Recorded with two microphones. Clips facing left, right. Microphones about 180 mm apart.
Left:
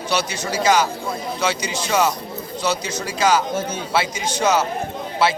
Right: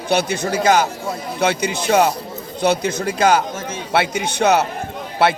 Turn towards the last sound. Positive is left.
turn(degrees=-60)  # may be behind; listen again after turning